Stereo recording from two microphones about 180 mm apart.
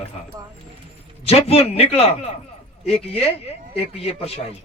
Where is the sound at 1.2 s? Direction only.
35° left (ahead or behind).